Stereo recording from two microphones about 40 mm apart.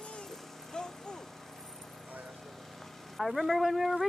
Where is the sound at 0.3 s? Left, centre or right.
Centre.